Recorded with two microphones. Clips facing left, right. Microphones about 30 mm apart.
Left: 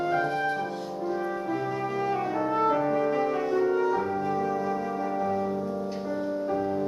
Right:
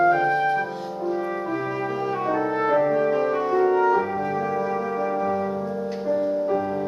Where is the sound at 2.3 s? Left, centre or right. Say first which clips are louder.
Right 5 dB; right.